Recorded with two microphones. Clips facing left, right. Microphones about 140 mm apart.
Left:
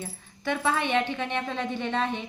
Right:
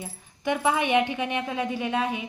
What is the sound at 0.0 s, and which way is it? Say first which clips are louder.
Speech: right 2 dB; 15° right (ahead or behind).